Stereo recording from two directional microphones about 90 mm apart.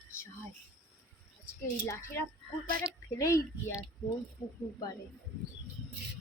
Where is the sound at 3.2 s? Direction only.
35° left (ahead or behind).